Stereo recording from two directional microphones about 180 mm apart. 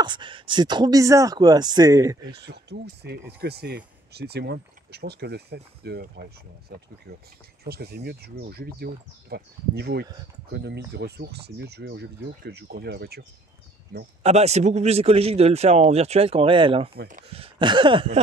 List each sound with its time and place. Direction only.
0.0 s speech: 25° right (ahead or behind)
2.4 s speech: 65° right (ahead or behind)
6.7 s speech: 50° right (ahead or behind)
13.9 s speech: 55° right (ahead or behind)
14.2 s a man's voice: 35° right (ahead or behind)